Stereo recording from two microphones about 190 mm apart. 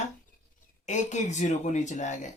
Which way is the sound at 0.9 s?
40° left (ahead or behind).